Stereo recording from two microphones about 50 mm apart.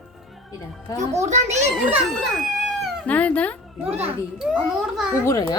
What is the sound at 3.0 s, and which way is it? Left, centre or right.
Speech, left.